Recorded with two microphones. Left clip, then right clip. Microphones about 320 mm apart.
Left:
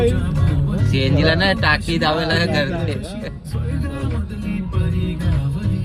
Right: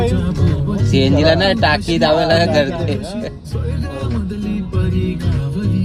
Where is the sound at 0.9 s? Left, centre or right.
Centre.